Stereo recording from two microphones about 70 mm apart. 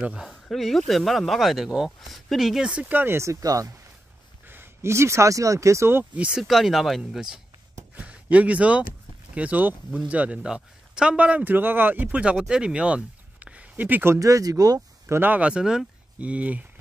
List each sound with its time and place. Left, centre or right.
0.0 s speech: centre
0.3 s speech: centre
2.7 s speech: centre
3.0 s speech: right
3.3 s speech: right
4.5 s speech: right
6.1 s speech: centre
6.4 s speech: centre
7.9 s a man's voice: centre
12.2 s speech: centre
14.1 s speech: right
15.0 s a man's voice: right
15.5 s speech: centre
16.2 s a man's voice: centre